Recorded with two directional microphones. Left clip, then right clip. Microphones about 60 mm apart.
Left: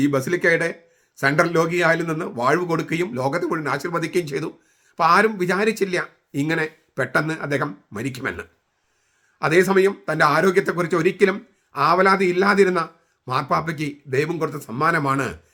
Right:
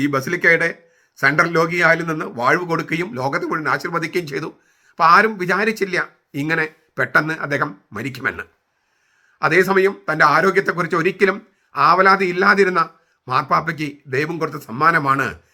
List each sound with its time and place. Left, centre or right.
0.0 s a man's voice: left